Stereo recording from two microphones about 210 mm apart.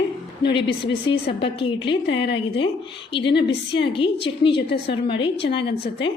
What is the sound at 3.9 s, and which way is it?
A woman's voice, 25° left (ahead or behind).